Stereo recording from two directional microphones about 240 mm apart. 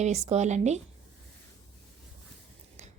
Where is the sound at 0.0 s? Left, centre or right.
Right.